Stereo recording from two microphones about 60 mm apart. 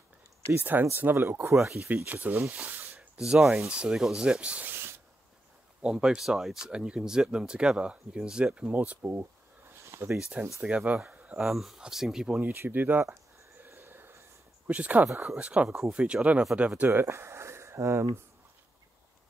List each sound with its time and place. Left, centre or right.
0.6 s speech: right
2.0 s speech: right
3.2 s speech: centre
4.6 s spray: right
5.8 s speech: centre
9.0 s speech: right
9.8 s a sound: right
10.6 s speech: right
11.1 s a sound: right
11.3 s speech: centre
12.3 s speech: right
13.7 s a sound: right
14.7 s speech: right